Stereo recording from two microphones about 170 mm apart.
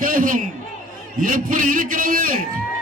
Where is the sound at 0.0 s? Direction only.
55° right (ahead or behind).